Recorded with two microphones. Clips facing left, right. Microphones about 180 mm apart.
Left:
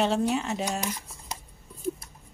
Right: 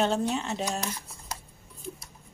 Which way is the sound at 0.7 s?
15° left (ahead or behind).